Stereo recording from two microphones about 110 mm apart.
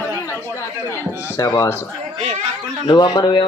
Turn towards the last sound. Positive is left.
turn(degrees=45)  # may be behind; listen again after turning